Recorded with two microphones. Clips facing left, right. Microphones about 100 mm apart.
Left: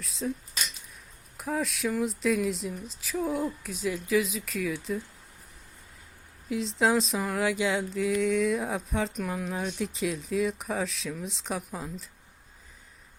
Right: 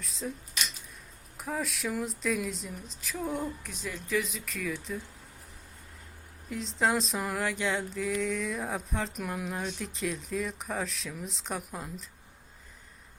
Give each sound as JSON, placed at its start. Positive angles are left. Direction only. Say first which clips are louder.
{"t": 0.0, "sound": "speech", "louder": "left 4 dB", "side_deg": 0}
{"t": 1.4, "sound": "speech", "louder": "left 4 dB", "side_deg": 0}
{"t": 6.5, "sound": "speech", "louder": "left 3 dB", "side_deg": 0}